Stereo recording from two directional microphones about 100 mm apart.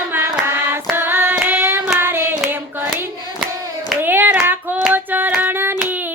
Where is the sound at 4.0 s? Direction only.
20° right (ahead or behind).